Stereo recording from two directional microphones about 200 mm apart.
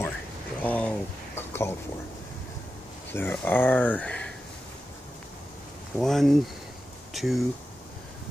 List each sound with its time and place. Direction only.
0.6 s a sound: 5° left (ahead or behind)
3.1 s speech: 10° left (ahead or behind)
5.9 s speech: centre (ahead or behind)